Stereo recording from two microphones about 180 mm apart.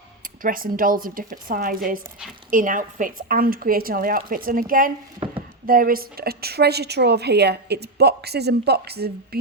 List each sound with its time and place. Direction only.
0.4 s a woman's voice: 50° right (ahead or behind)